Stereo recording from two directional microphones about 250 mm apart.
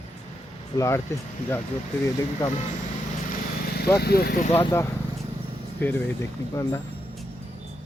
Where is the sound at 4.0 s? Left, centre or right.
Left.